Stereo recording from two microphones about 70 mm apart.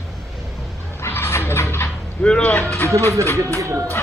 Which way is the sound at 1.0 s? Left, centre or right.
Left.